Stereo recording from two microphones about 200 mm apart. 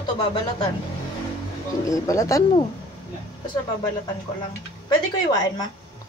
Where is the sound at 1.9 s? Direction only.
15° left (ahead or behind).